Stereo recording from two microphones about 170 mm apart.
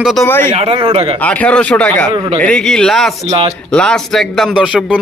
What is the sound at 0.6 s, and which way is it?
Speech, 35° right (ahead or behind).